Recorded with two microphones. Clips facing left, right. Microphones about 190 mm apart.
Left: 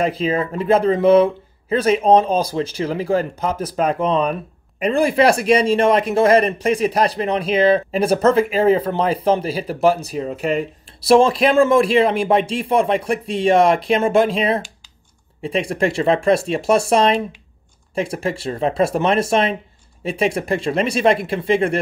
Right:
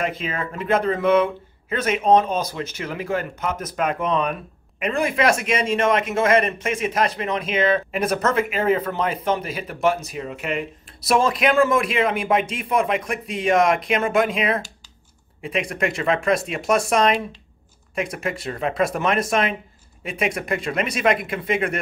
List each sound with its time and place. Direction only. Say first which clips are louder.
0.0 s speech: left 7 dB; 35° left (ahead or behind)